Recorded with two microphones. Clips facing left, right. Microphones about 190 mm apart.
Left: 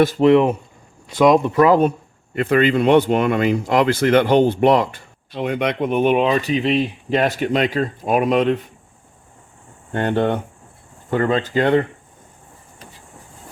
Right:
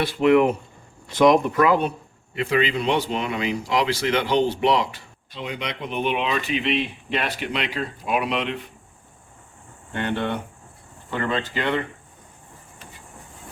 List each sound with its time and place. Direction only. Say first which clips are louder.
0.0 s speech: left 4 dB; 40° left (ahead or behind)
2.3 s speech: left 6 dB; 50° left (ahead or behind)
9.9 s speech: left 7 dB; 45° left (ahead or behind)